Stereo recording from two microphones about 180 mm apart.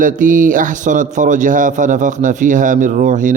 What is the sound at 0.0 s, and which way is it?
A man's voice, 45° right (ahead or behind).